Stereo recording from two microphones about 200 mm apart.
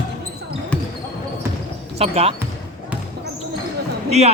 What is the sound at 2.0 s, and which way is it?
Speech, 30° right (ahead or behind).